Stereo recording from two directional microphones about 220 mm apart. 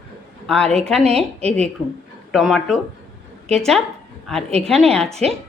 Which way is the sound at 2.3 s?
Centre (ahead or behind).